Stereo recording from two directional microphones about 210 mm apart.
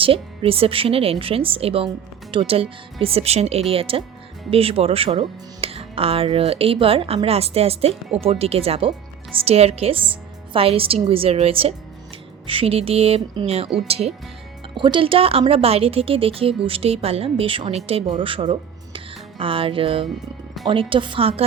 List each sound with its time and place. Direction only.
0.0 s speech: 25° right (ahead or behind)
18.9 s music: 25° right (ahead or behind)
20.7 s speech: 25° right (ahead or behind)